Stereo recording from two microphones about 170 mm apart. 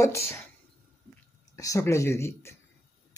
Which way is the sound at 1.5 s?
20° left (ahead or behind).